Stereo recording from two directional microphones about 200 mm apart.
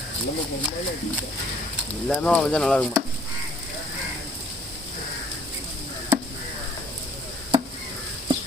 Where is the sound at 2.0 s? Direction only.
5° left (ahead or behind).